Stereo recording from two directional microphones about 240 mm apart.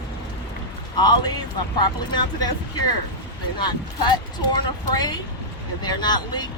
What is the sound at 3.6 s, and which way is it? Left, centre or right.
Speech, centre.